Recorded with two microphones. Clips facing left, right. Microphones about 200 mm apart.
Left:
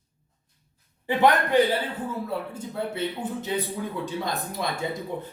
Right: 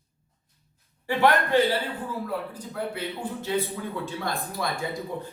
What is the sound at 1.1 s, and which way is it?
A man's voice, 20° left (ahead or behind).